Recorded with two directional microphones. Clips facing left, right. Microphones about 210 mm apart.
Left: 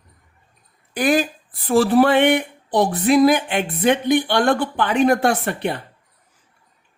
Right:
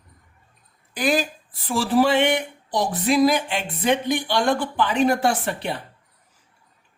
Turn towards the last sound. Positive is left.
turn(degrees=55)  # may be behind; listen again after turning